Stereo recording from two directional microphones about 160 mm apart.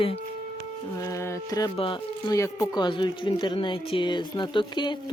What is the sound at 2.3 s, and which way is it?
Speech, 20° left (ahead or behind).